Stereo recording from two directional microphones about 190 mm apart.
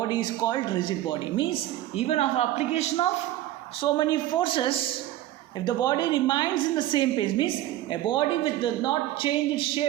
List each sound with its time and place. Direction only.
0.1 s a woman's voice: 20° left (ahead or behind)